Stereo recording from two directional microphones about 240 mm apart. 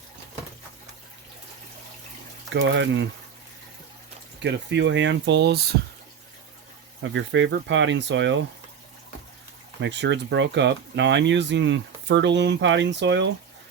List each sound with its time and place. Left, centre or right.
2.5 s speech: right
4.4 s speech: right
7.0 s speech: right
9.8 s speech: right